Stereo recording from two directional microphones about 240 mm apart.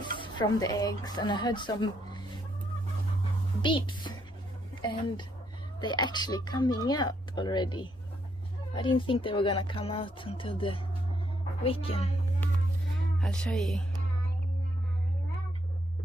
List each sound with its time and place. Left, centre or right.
0.2 s speech: centre
3.6 s speech: centre
13.2 s speech: centre